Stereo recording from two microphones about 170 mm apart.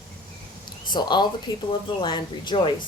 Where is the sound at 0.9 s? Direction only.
25° left (ahead or behind).